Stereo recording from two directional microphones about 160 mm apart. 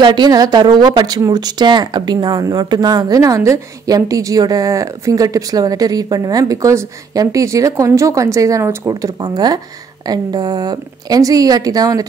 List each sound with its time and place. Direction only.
0.0 s speech: 30° right (ahead or behind)